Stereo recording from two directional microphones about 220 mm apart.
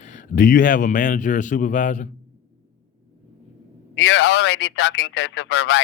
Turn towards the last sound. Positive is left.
turn(degrees=55)  # may be behind; listen again after turning